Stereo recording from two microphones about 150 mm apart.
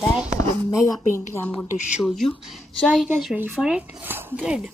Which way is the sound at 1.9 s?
Centre (ahead or behind).